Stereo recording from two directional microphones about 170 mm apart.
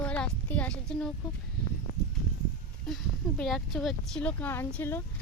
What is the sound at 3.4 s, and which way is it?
A child's voice, centre (ahead or behind).